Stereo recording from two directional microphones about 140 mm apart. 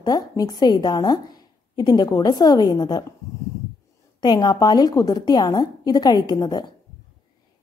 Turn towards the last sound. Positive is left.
turn(degrees=30)  # may be behind; listen again after turning